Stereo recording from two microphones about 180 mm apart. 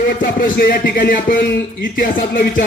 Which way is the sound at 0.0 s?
50° left (ahead or behind).